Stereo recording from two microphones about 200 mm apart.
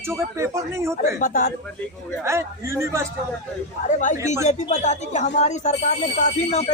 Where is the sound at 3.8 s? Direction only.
40° left (ahead or behind).